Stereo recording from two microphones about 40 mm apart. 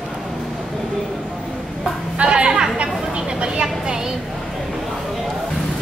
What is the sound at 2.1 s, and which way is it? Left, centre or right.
Music, right.